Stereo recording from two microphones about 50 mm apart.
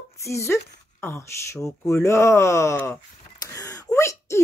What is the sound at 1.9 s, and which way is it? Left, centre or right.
A woman's voice, left.